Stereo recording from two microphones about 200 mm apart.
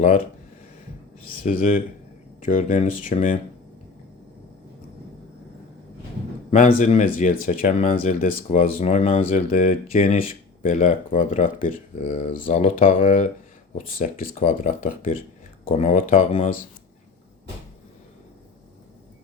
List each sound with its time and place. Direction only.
1.5 s speech: 45° left (ahead or behind)
6.5 s speech: 40° left (ahead or behind)